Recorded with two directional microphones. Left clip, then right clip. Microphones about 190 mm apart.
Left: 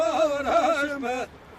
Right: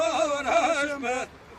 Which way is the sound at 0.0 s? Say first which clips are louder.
Left 2 dB; 55° left (ahead or behind).